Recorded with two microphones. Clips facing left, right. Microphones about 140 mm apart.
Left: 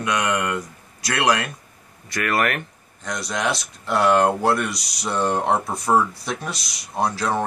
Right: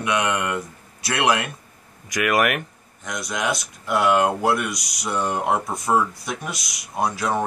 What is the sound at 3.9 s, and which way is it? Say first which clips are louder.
Speech: left 1 dB; 10° right (ahead or behind).